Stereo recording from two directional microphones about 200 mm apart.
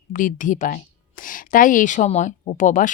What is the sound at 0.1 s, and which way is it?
Speech, 40° left (ahead or behind).